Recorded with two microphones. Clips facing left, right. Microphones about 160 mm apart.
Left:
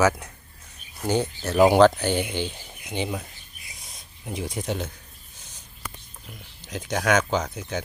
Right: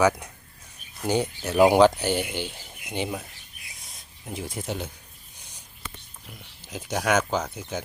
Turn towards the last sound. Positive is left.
turn(degrees=-10)  # may be behind; listen again after turning